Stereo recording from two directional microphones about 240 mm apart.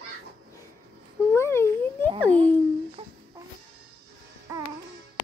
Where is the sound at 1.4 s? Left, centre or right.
Centre.